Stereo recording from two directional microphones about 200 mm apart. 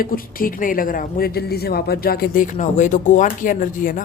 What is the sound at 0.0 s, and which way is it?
Speech, 45° left (ahead or behind).